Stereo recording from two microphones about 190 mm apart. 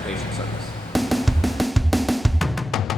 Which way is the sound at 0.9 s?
Centre (ahead or behind).